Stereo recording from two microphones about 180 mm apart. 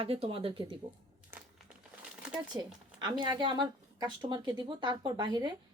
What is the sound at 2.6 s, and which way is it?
Speech, 25° right (ahead or behind).